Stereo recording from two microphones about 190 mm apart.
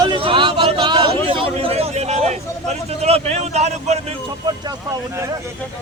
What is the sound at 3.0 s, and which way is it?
A man's voice, 35° right (ahead or behind).